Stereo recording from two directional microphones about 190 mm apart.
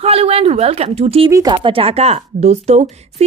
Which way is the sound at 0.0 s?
30° right (ahead or behind).